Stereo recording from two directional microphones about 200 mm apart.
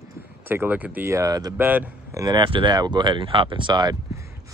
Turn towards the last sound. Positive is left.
turn(degrees=-20)  # may be behind; listen again after turning